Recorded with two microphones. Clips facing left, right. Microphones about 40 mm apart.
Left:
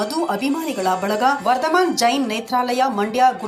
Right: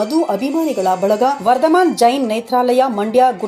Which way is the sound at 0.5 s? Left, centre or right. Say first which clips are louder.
Right 5 dB; left.